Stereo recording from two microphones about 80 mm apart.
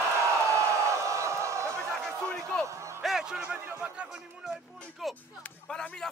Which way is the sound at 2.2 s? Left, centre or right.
Centre.